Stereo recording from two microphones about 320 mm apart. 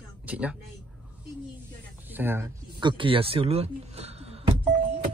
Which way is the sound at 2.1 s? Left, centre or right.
Centre.